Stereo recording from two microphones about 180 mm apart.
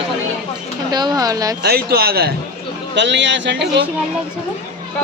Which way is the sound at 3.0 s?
75° right (ahead or behind).